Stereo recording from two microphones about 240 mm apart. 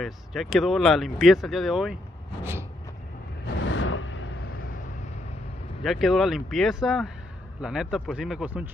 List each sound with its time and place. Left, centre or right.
0.0 s speech: centre
3.6 s a sound: left
5.8 s speech: centre